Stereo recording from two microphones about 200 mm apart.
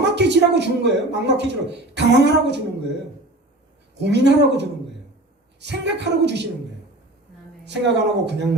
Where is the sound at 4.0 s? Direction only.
60° right (ahead or behind).